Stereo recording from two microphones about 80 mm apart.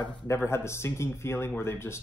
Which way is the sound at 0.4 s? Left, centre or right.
Left.